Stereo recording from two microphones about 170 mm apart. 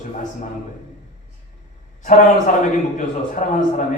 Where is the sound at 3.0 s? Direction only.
45° left (ahead or behind).